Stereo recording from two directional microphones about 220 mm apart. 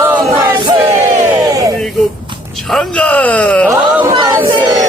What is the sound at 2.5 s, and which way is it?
Speech, centre (ahead or behind).